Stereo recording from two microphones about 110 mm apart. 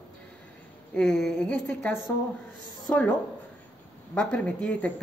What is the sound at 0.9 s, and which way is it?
Speech, 5° left (ahead or behind).